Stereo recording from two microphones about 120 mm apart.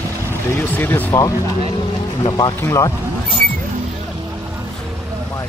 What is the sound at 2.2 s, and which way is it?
Speech, 40° left (ahead or behind).